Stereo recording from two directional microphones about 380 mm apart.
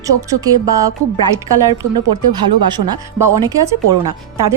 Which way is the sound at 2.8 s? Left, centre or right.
Right.